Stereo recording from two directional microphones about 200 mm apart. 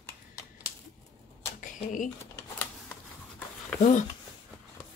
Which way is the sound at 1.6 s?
40° left (ahead or behind).